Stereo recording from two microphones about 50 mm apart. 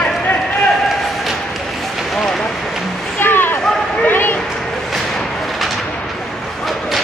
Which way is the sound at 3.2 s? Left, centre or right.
Left.